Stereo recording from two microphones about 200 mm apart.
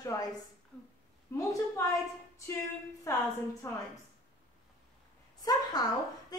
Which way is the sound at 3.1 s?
15° left (ahead or behind).